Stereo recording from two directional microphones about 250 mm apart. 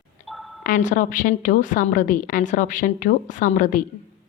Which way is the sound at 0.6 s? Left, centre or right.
Left.